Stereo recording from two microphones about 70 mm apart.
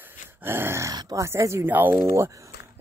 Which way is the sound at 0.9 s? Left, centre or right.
Right.